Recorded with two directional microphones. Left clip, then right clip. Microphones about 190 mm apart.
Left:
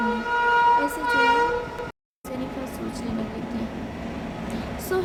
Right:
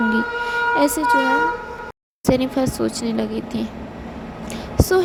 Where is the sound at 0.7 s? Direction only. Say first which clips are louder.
Right 5 dB; 50° right (ahead or behind).